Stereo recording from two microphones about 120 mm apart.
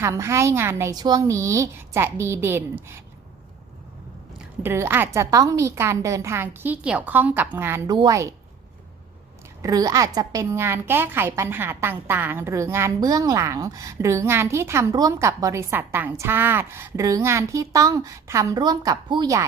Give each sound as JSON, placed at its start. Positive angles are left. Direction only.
{"t": 0.0, "sound": "a woman's voice", "side_deg": -25}
{"t": 0.9, "sound": "a woman's voice", "side_deg": -35}
{"t": 4.6, "sound": "a woman's voice", "side_deg": -20}
{"t": 7.9, "sound": "a woman's voice", "side_deg": -35}
{"t": 9.6, "sound": "a woman's voice", "side_deg": -30}